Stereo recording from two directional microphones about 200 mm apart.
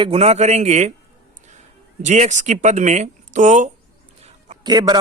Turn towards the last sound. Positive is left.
turn(degrees=-20)  # may be behind; listen again after turning